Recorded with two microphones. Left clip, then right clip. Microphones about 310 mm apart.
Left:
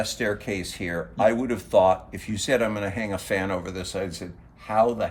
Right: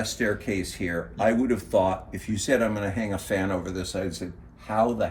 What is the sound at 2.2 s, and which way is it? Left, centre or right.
Speech, left.